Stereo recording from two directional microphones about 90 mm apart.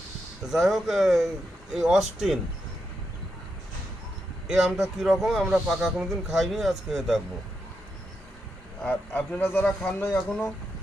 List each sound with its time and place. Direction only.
0.4 s speech: 5° right (ahead or behind)
4.4 s speech: 5° right (ahead or behind)
8.8 s a man's voice: 20° left (ahead or behind)